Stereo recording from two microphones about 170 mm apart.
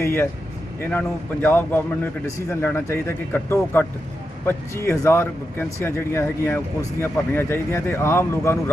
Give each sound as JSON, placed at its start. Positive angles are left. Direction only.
{"t": 0.0, "sound": "speech", "side_deg": 15}